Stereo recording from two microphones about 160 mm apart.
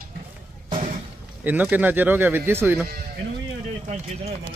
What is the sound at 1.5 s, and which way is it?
Speech, 10° right (ahead or behind).